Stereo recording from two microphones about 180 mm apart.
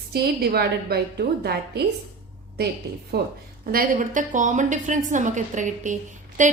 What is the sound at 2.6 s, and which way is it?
A woman's voice, 60° right (ahead or behind).